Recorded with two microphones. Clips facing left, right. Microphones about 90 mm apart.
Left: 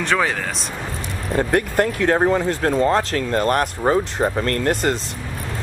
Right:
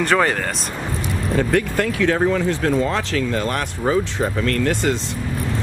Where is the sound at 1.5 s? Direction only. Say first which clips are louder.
Left 1 dB; 45° left (ahead or behind).